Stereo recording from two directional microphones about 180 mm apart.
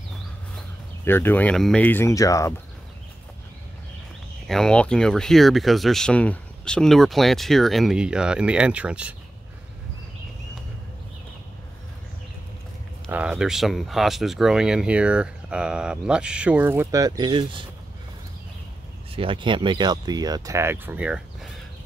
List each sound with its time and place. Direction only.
1.0 s speech: 10° left (ahead or behind)
4.5 s speech: 5° left (ahead or behind)
13.1 s speech: 5° right (ahead or behind); by 17.6 s 25° right (ahead or behind)
19.1 s speech: 30° right (ahead or behind); by 21.5 s 5° right (ahead or behind)